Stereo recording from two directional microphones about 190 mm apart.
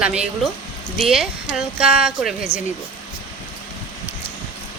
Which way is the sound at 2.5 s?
30° left (ahead or behind).